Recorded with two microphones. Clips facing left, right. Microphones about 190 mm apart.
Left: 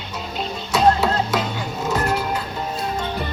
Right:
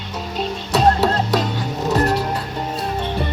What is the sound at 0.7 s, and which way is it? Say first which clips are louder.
Music: right 1 dB; 35° right (ahead or behind).